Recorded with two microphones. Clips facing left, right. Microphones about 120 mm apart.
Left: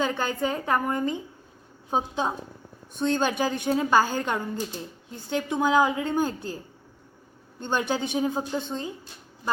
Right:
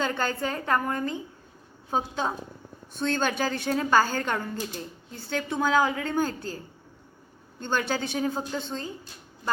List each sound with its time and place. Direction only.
0.0 s a woman's voice: 15° left (ahead or behind)
7.6 s a woman's voice: 15° left (ahead or behind)